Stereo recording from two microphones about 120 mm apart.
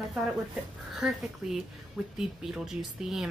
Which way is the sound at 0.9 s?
5° right (ahead or behind).